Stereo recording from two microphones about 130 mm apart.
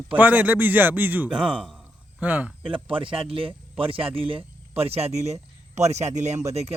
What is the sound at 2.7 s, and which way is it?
Speech, 40° right (ahead or behind).